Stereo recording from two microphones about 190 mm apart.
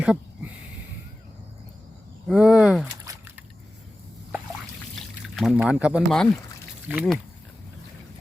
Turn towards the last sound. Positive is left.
turn(degrees=0)  # may be behind; listen again after turning